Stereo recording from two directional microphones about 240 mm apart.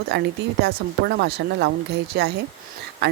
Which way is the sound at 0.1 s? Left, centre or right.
Right.